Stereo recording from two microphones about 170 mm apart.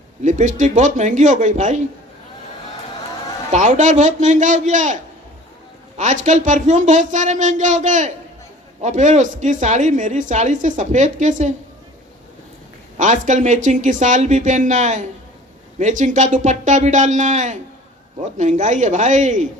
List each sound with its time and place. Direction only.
0.2 s speech: 45° right (ahead or behind)
3.5 s speech: 45° right (ahead or behind)
6.0 s speech: 45° right (ahead or behind)
13.0 s speech: 45° right (ahead or behind)